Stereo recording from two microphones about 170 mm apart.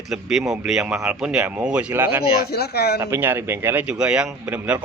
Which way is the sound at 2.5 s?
70° left (ahead or behind).